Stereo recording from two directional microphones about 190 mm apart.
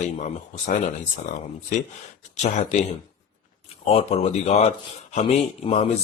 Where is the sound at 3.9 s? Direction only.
30° left (ahead or behind).